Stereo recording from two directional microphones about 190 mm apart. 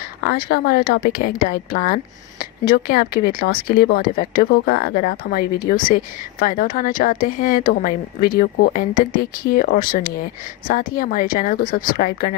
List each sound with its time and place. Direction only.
0.2 s speech: 55° left (ahead or behind)